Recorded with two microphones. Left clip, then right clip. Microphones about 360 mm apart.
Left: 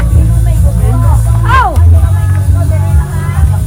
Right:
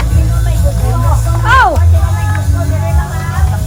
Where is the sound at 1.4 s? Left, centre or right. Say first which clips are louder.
Right 1 dB; right.